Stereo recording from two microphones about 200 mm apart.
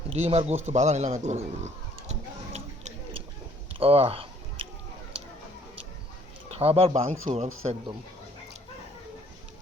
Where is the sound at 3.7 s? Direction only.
30° right (ahead or behind).